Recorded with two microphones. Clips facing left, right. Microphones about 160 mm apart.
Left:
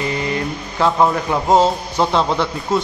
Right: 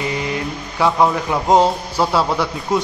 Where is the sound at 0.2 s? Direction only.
10° right (ahead or behind).